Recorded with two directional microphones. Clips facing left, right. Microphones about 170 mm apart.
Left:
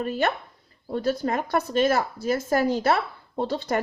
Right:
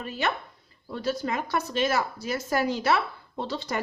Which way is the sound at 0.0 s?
50° left (ahead or behind).